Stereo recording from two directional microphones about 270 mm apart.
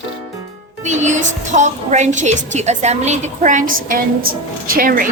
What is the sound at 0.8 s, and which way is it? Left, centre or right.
Music, right.